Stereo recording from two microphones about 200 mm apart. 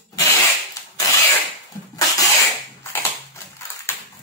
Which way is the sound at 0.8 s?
15° left (ahead or behind).